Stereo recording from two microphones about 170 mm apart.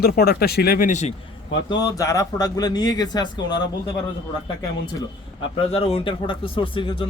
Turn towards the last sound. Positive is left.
turn(degrees=30)  # may be behind; listen again after turning